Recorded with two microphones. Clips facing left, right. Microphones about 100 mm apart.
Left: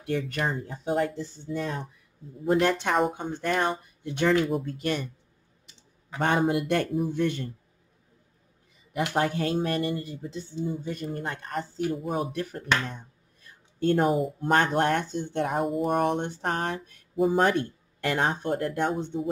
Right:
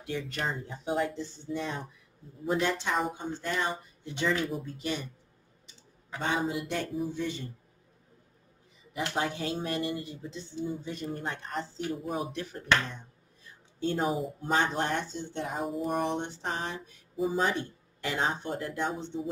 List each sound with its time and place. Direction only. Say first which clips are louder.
0.0 s speech: left 5 dB; 55° left (ahead or behind)
6.1 s speech: left 6 dB; 60° left (ahead or behind)
9.1 s speech: left 6 dB; 55° left (ahead or behind)
12.4 s a sound: left 1 dB; 50° left (ahead or behind)
14.0 s speech: left 6 dB; centre (ahead or behind)
14.4 s speech: left 5 dB; 60° left (ahead or behind)